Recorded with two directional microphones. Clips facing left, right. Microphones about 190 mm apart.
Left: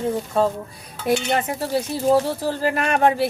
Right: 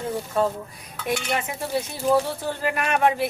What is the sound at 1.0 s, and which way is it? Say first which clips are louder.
Speech: left 6 dB; 35° left (ahead or behind).